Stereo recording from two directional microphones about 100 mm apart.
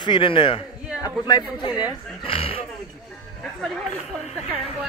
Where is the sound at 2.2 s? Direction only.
65° left (ahead or behind).